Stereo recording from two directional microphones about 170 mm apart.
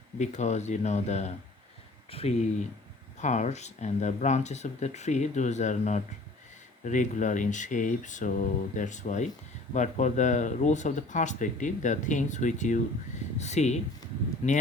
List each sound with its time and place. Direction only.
0.2 s speech: 45° left (ahead or behind)